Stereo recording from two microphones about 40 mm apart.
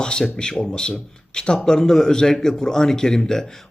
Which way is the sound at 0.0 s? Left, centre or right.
Centre.